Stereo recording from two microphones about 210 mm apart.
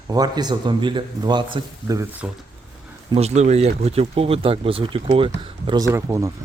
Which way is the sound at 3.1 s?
30° right (ahead or behind).